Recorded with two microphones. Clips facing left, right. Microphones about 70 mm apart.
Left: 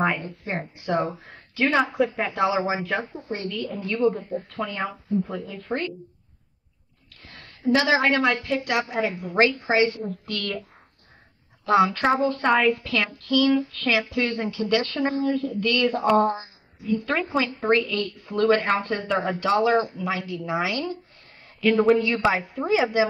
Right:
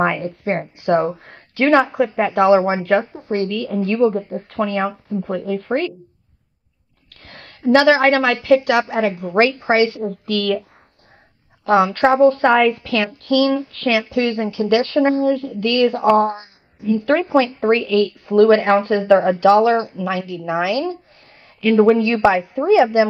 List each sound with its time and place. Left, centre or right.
0.0 s speech: right
7.1 s a woman's voice: right
11.6 s a woman's voice: right
21.7 s a woman's voice: right
22.0 s speech: right